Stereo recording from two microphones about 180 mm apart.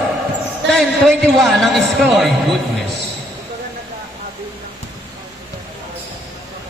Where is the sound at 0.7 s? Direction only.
Centre (ahead or behind).